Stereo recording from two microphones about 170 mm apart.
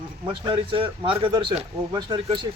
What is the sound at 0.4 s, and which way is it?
Speech, 30° right (ahead or behind).